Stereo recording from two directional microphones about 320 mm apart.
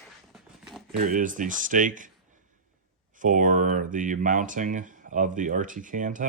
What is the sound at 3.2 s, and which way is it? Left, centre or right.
Speech, right.